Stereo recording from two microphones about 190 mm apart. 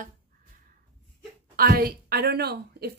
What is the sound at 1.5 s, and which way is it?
A woman's voice, 50° right (ahead or behind).